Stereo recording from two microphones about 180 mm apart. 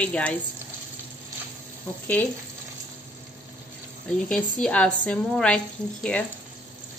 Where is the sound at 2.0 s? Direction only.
10° left (ahead or behind).